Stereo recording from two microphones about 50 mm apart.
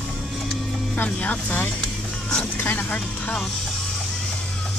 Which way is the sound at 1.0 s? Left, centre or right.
Left.